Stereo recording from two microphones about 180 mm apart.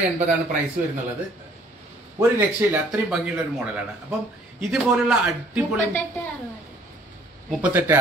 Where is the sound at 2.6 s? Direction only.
5° right (ahead or behind).